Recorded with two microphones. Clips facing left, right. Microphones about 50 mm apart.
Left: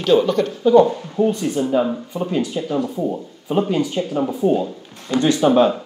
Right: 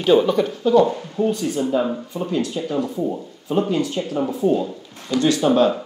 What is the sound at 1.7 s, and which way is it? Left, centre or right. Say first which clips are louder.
Speech: left 2 dB; centre.